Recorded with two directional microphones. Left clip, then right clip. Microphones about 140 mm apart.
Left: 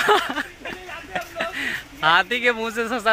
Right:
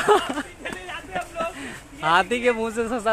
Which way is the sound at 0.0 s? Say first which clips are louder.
Left 1 dB; centre (ahead or behind).